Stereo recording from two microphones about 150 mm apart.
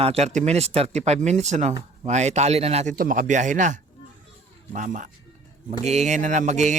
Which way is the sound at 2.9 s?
65° right (ahead or behind).